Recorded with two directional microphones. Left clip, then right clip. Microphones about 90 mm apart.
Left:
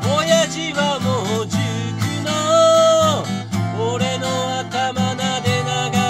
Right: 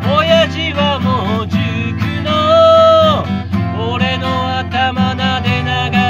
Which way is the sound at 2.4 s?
50° left (ahead or behind).